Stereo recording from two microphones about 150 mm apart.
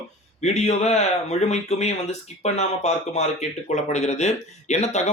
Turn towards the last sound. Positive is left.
turn(degrees=50)  # may be behind; listen again after turning